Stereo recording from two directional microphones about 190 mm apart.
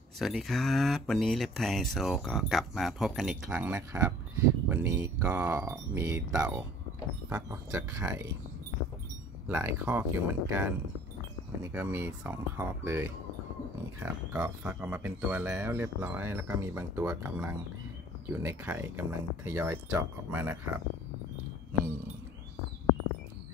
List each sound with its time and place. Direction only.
0.2 s speech: centre (ahead or behind); by 8.3 s 15° right (ahead or behind)
9.5 s speech: 10° right (ahead or behind)